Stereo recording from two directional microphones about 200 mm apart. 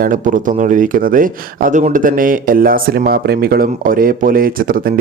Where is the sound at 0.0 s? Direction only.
40° right (ahead or behind).